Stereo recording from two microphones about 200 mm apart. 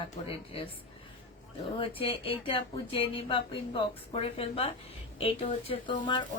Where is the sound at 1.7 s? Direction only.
30° left (ahead or behind).